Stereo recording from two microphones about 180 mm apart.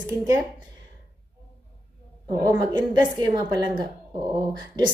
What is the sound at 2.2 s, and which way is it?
A woman's voice, 20° right (ahead or behind).